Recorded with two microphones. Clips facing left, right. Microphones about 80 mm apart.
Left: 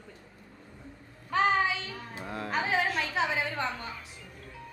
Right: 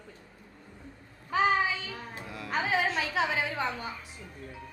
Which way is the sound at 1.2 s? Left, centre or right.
Centre.